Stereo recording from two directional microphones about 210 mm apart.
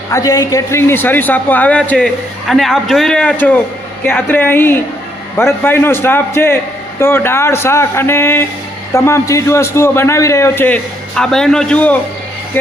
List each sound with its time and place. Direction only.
0.1 s a man's voice: 15° left (ahead or behind)